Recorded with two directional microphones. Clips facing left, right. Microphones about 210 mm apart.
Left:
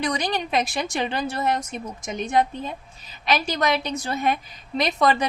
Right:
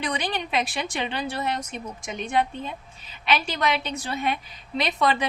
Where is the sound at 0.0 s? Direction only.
40° left (ahead or behind).